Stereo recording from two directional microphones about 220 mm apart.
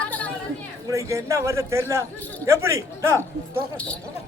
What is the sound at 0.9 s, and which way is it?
A man's voice, 15° right (ahead or behind).